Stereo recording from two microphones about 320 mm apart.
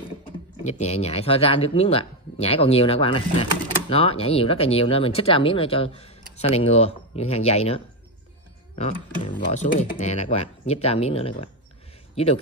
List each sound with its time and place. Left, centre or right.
0.7 s speech: left